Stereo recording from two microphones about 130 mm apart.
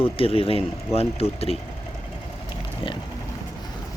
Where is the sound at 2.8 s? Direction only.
45° left (ahead or behind).